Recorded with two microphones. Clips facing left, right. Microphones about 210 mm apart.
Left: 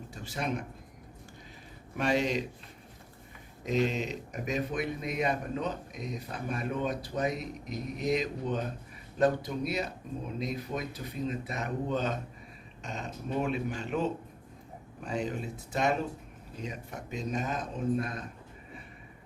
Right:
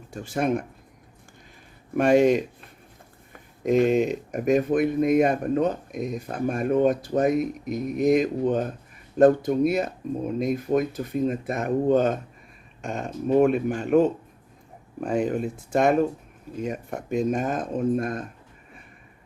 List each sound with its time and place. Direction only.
0.1 s speech: 50° right (ahead or behind)
2.0 s speech: 50° right (ahead or behind)